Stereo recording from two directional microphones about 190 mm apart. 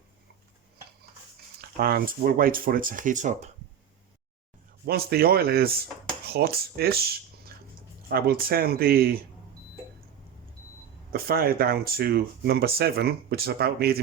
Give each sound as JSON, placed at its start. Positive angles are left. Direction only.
{"t": 1.8, "sound": "speech", "side_deg": -50}
{"t": 4.9, "sound": "speech", "side_deg": -55}
{"t": 8.1, "sound": "speech", "side_deg": -50}
{"t": 11.1, "sound": "speech", "side_deg": -55}